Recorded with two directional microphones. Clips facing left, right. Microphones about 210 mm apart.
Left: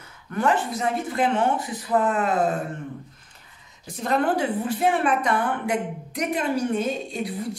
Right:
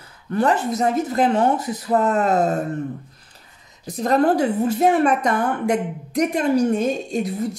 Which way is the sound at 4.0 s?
40° right (ahead or behind).